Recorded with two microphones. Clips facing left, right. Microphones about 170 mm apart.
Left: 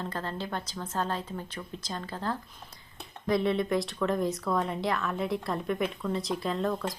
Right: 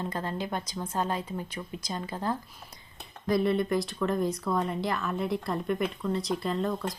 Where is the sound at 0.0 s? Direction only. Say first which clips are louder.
Right 2 dB; 15° right (ahead or behind).